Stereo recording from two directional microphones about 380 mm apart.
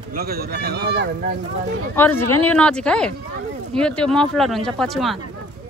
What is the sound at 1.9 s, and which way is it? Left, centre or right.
Speech, centre.